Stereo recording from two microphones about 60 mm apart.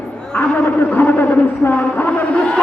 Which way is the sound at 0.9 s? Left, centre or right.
Left.